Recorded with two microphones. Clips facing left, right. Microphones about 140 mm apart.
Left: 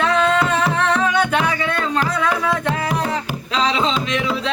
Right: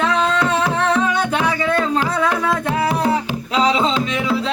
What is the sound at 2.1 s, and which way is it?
Music, 25° right (ahead or behind).